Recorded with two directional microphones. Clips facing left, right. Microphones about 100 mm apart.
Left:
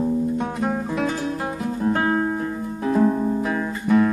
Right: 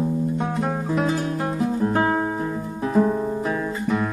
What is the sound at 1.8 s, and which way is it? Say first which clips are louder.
Music: left 2 dB; 10° right (ahead or behind).